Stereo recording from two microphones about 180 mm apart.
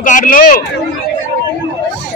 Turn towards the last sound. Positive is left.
turn(degrees=50)  # may be behind; listen again after turning